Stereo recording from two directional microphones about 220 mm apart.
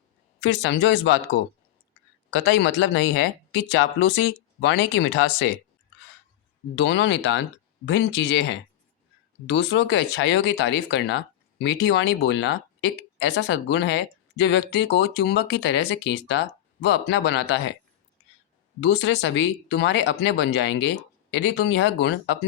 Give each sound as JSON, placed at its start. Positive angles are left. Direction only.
{"t": 0.3, "sound": "speech", "side_deg": 55}
{"t": 2.6, "sound": "speech", "side_deg": 55}
{"t": 6.7, "sound": "speech", "side_deg": 55}
{"t": 18.8, "sound": "speech", "side_deg": 55}